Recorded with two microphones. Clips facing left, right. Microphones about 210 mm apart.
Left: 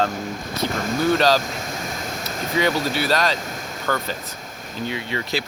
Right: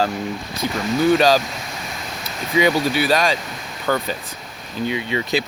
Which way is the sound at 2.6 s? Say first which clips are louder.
Right 4 dB; 15° right (ahead or behind).